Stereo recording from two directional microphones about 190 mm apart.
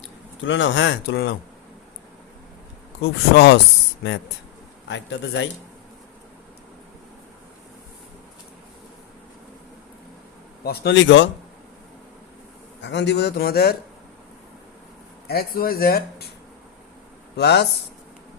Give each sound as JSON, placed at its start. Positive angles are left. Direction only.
{"t": 0.0, "sound": "speech", "side_deg": 75}
{"t": 3.0, "sound": "speech", "side_deg": 65}
{"t": 4.9, "sound": "a man's voice", "side_deg": 75}
{"t": 10.6, "sound": "a man's voice", "side_deg": 60}
{"t": 12.8, "sound": "speech", "side_deg": 65}
{"t": 15.3, "sound": "speech", "side_deg": 50}
{"t": 17.3, "sound": "speech", "side_deg": 60}